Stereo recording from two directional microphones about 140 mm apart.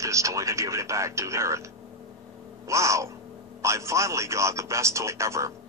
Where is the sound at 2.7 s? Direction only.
20° right (ahead or behind).